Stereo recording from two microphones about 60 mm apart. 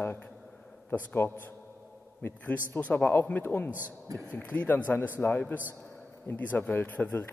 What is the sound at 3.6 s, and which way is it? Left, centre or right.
Speech, right.